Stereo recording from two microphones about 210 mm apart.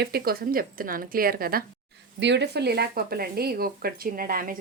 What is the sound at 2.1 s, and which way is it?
Speech, 55° right (ahead or behind).